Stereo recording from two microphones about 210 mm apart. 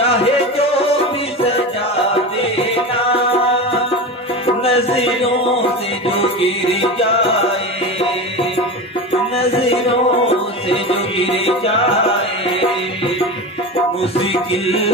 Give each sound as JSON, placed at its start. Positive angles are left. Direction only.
{"t": 0.0, "sound": "music", "side_deg": 30}
{"t": 2.4, "sound": "music", "side_deg": 30}
{"t": 9.4, "sound": "music", "side_deg": 30}
{"t": 14.2, "sound": "music", "side_deg": 25}